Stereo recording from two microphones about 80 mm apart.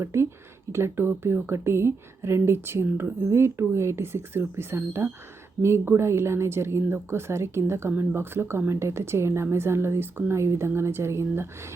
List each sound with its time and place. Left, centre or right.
0.0 s a woman's voice: right